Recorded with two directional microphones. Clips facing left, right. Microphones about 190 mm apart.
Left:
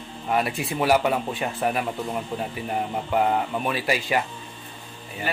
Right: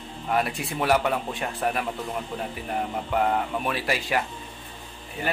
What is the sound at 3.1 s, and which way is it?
Speech, 5° left (ahead or behind).